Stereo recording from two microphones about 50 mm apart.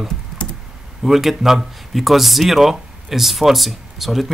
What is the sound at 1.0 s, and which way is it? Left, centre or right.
Speech, centre.